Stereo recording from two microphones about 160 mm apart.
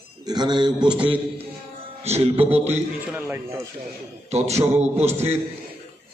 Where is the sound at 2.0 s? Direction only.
40° right (ahead or behind).